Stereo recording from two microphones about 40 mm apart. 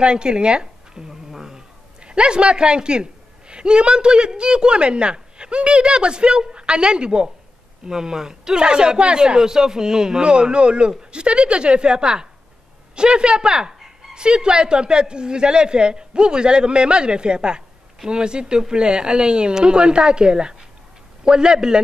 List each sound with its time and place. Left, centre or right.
0.0 s speech: right
1.3 s cat: centre
2.0 s a man's voice: right
13.5 s speech: centre